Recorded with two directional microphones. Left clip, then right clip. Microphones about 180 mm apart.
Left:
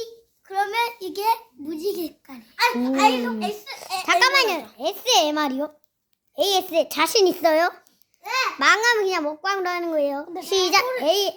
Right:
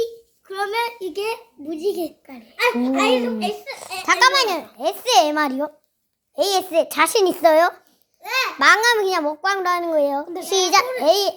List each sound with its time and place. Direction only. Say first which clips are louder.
0.0 s a sound: right 10 dB; 15° left (ahead or behind)
2.0 s a child's voice: right 4 dB; 30° left (ahead or behind)
4.0 s a child's voice: right 2 dB; centre (ahead or behind)
8.2 s babbling: right 2 dB; 15° right (ahead or behind)
8.5 s a child's voice: right 4 dB; centre (ahead or behind)